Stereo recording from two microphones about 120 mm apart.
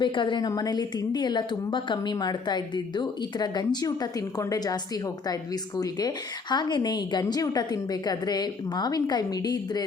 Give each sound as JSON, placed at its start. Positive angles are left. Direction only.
{"t": 0.0, "sound": "a woman's voice", "side_deg": 40}